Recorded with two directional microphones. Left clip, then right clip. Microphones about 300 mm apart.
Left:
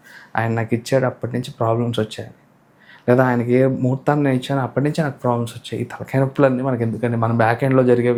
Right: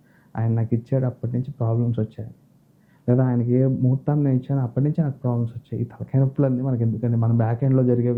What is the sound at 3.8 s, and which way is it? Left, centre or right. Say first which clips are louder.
Speech: left 4 dB; left.